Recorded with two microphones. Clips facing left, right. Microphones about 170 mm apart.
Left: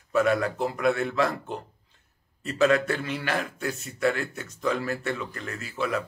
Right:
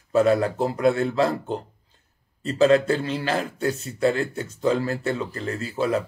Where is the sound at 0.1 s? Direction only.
30° right (ahead or behind).